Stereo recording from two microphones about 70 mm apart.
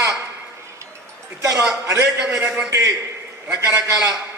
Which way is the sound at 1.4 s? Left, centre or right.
Right.